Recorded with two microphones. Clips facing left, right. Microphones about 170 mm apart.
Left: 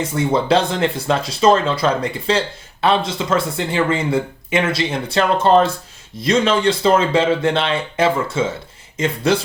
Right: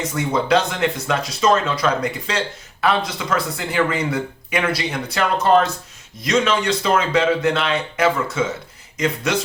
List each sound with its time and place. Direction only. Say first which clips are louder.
0.0 s speech: left 3 dB; 30° left (ahead or behind)